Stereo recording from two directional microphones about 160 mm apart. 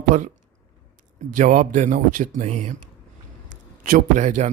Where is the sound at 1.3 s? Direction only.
55° right (ahead or behind).